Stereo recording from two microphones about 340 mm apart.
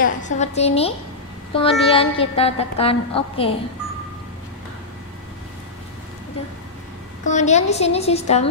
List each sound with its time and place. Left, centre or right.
0.2 s a woman's voice: centre
7.2 s a woman's voice: left